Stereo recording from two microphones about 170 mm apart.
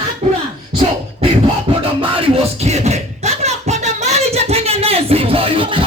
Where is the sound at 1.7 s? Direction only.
30° right (ahead or behind).